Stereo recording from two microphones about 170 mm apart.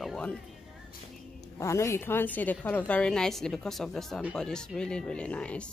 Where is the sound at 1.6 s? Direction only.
15° left (ahead or behind).